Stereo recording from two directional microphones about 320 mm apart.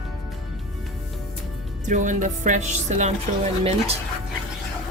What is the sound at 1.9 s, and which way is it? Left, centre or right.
Speech, right.